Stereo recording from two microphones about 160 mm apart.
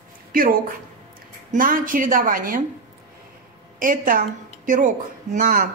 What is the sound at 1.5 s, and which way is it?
Speech, 60° right (ahead or behind).